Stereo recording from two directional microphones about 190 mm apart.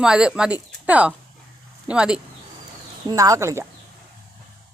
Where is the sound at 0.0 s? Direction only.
5° right (ahead or behind).